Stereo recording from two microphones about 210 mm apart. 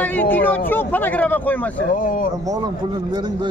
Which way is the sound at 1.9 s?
40° left (ahead or behind).